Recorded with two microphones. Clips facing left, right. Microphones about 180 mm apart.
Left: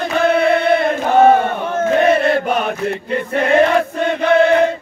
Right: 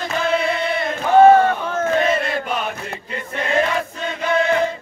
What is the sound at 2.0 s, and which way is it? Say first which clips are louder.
Chant: left 7 dB; 60° left (ahead or behind).